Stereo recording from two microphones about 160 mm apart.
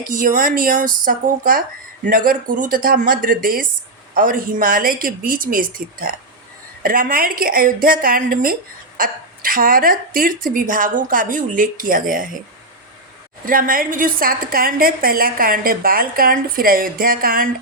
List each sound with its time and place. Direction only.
0.0 s a woman's voice: 60° right (ahead or behind)
13.4 s a woman's voice: 60° right (ahead or behind)